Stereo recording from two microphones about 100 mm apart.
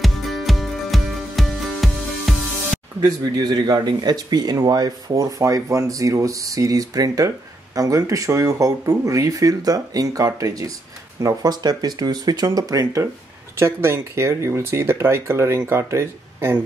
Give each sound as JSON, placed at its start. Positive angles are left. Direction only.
{"t": 0.0, "sound": "music", "side_deg": 0}
{"t": 3.0, "sound": "speech", "side_deg": -45}
{"t": 13.6, "sound": "speech", "side_deg": -25}